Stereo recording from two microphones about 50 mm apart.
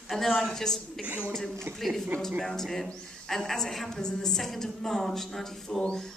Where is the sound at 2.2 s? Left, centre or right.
Centre.